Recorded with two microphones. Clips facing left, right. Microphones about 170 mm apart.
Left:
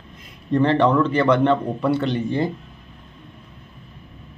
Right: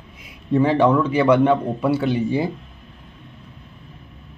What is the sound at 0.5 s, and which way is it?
A man's voice, 5° right (ahead or behind).